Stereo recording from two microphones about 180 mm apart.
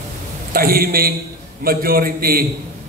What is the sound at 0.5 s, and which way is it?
A man's voice, 55° right (ahead or behind).